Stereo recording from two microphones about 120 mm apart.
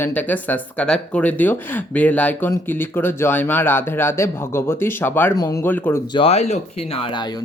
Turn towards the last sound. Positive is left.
turn(degrees=35)  # may be behind; listen again after turning